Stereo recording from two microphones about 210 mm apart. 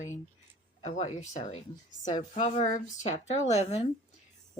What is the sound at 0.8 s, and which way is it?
A woman's voice, 35° left (ahead or behind).